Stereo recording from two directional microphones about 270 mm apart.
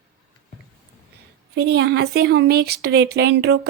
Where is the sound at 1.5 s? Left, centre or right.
Right.